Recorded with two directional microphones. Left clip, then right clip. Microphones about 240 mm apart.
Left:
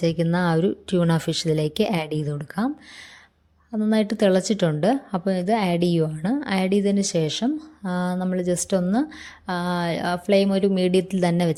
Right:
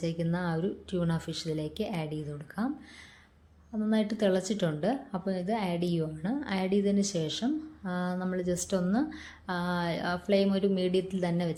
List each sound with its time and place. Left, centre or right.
0.0 s a woman's voice: left
3.7 s a woman's voice: left